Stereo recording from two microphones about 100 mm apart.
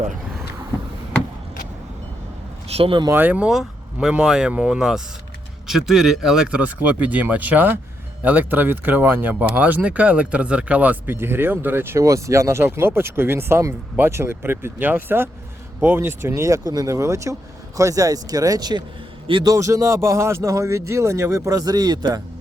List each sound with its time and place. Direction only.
2.6 s a sound: 70° right (ahead or behind)
3.1 s speech: 15° right (ahead or behind)
3.5 s speech: 5° right (ahead or behind); by 22.2 s 40° right (ahead or behind)